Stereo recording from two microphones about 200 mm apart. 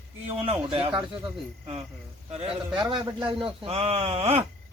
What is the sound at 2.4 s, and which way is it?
A man's voice, 25° right (ahead or behind).